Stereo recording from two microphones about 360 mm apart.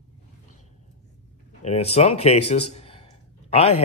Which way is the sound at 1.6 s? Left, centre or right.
Centre.